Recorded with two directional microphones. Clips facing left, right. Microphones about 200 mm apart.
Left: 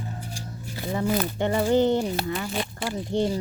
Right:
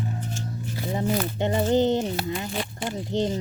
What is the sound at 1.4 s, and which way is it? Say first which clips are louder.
Speech: even; 20° right (ahead or behind).